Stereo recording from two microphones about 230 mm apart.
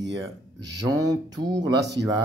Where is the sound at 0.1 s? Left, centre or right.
Centre.